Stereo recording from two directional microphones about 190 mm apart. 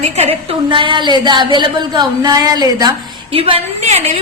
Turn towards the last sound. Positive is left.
turn(degrees=-35)  # may be behind; listen again after turning